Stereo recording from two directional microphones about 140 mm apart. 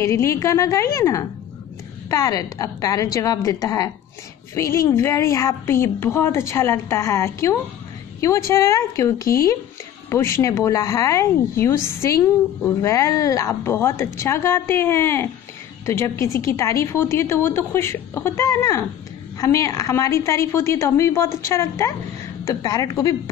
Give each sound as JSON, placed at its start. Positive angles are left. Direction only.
{"t": 0.0, "sound": "a woman's voice", "side_deg": 20}